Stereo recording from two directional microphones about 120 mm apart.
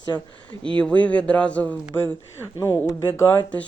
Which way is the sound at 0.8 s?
10° left (ahead or behind).